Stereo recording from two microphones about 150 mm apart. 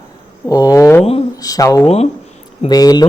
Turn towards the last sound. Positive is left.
turn(degrees=25)  # may be behind; listen again after turning